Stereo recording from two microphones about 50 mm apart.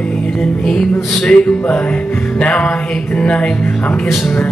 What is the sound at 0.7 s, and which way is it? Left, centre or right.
Music, centre.